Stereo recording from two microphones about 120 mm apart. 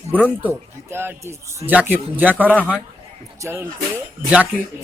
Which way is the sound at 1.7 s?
10° right (ahead or behind).